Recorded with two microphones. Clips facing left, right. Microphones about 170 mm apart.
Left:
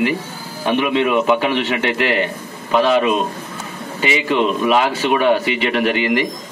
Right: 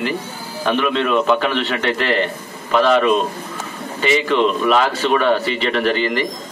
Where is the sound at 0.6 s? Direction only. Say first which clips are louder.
Left 2 dB; 15° left (ahead or behind).